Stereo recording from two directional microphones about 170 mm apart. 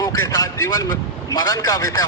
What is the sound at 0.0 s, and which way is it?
A man's voice, 20° left (ahead or behind).